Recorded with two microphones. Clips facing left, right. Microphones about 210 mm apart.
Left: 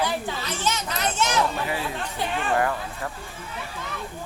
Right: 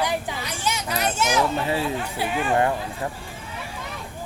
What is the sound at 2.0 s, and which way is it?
Speech, 5° right (ahead or behind).